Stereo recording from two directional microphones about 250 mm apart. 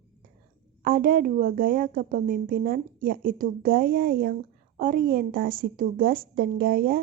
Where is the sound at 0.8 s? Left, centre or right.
Right.